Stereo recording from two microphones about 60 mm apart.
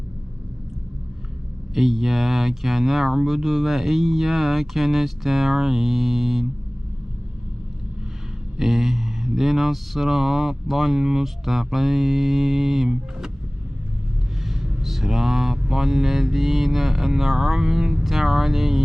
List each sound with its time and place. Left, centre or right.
1.7 s speech: centre
8.5 s speech: centre
14.5 s speech: centre